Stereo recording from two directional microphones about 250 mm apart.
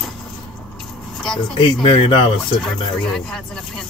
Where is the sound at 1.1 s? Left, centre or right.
Centre.